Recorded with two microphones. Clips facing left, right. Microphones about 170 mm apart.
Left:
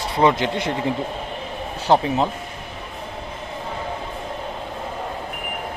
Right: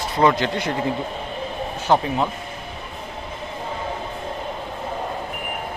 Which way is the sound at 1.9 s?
25° left (ahead or behind).